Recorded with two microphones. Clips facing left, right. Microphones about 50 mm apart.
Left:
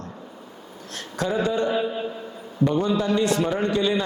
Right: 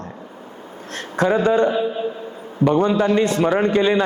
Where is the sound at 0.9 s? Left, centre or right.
Right.